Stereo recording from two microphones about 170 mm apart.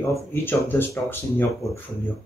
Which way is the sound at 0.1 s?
15° left (ahead or behind).